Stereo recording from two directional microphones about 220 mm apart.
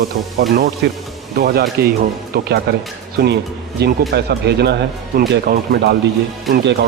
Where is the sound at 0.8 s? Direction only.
50° right (ahead or behind).